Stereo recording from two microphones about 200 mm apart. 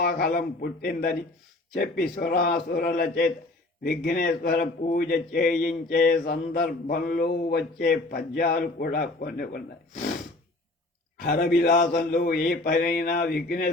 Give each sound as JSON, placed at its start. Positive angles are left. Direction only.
{"t": 0.0, "sound": "a man's voice", "side_deg": 50}
{"t": 11.2, "sound": "a man's voice", "side_deg": 45}